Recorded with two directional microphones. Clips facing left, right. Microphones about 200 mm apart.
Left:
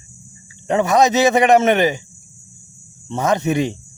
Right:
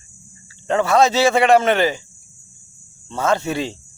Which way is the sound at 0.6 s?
20° left (ahead or behind).